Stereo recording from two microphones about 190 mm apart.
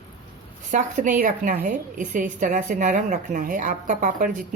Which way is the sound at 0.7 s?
45° right (ahead or behind).